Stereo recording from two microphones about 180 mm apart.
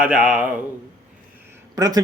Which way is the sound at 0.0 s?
5° right (ahead or behind).